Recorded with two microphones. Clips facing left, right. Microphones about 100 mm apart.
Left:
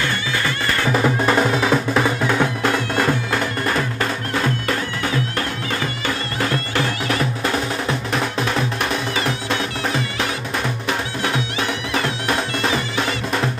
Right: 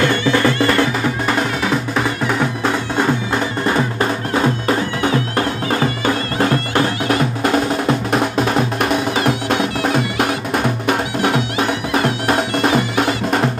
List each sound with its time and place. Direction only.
1.0 s music: centre (ahead or behind)
2.2 s music: 10° right (ahead or behind)
3.6 s music: 25° right (ahead or behind)
9.1 s music: 50° right (ahead or behind)
11.9 s music: 35° right (ahead or behind)
12.7 s music: 55° right (ahead or behind)